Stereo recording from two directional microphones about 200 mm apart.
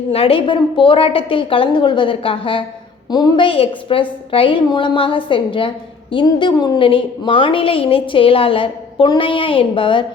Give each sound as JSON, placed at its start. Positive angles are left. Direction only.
{"t": 0.1, "sound": "a woman's voice", "side_deg": 30}